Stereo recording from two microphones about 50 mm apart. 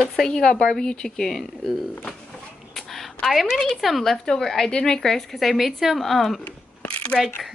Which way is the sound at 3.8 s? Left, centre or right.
Centre.